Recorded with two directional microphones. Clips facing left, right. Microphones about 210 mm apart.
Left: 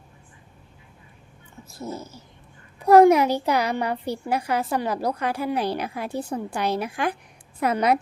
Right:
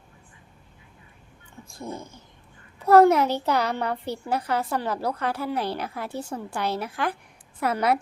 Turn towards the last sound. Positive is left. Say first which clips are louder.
# left 2 dB
turn(degrees=20)  # may be behind; listen again after turning